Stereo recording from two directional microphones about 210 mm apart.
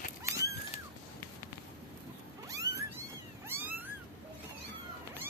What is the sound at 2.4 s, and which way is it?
Cat, 15° right (ahead or behind).